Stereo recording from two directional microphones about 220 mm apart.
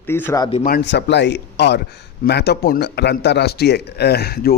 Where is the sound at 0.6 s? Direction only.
45° left (ahead or behind).